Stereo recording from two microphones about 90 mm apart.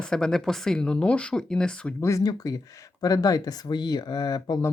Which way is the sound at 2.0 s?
35° left (ahead or behind).